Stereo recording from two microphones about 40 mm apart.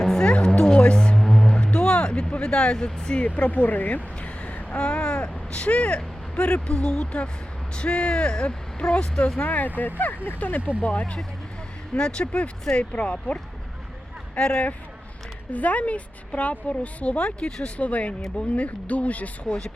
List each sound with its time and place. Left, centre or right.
0.0 s music: centre
0.3 s music: left
1.2 s vehicle: centre
1.5 s music: left
2.3 s speech: left
3.2 s speech: left
4.8 s a woman's voice: left
9.4 s a woman's voice: left
11.9 s a woman's voice: left
15.5 s a woman's voice: left